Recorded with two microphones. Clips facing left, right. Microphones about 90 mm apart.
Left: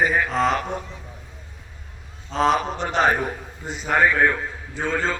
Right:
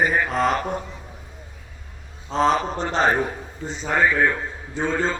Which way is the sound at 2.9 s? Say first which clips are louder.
Left 1 dB; 30° right (ahead or behind).